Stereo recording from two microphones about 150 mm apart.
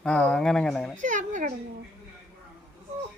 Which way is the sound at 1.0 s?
55° right (ahead or behind).